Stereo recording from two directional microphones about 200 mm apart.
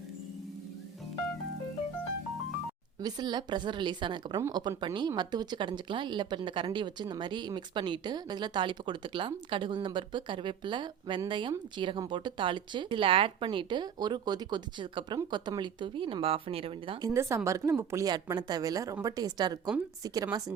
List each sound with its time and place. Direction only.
3.0 s speech: 20° right (ahead or behind)
17.1 s a woman's voice: 15° right (ahead or behind)